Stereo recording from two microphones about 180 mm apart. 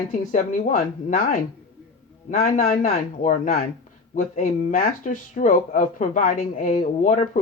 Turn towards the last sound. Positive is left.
turn(degrees=45)  # may be behind; listen again after turning